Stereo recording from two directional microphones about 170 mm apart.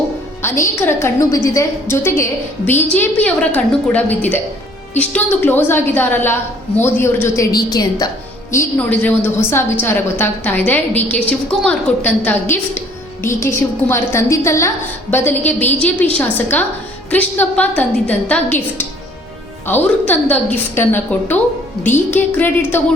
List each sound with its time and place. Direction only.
0.4 s a woman's voice: 15° left (ahead or behind)
8.5 s a woman's voice: 10° left (ahead or behind)